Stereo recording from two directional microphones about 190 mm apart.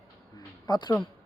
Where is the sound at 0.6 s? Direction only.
20° left (ahead or behind).